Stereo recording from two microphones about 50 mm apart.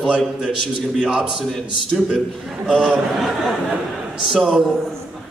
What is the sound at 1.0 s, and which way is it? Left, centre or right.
Speech, centre.